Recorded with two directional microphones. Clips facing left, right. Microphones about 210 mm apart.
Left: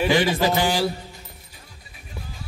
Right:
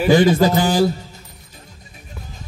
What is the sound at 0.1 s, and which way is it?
Speech, 45° right (ahead or behind).